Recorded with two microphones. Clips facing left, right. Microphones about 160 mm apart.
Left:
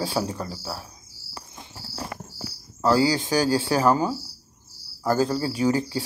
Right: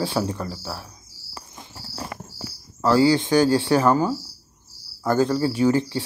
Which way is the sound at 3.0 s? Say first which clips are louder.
Right 8 dB; 25° right (ahead or behind).